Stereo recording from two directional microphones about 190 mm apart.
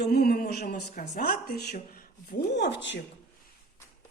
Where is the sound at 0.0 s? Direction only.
55° left (ahead or behind).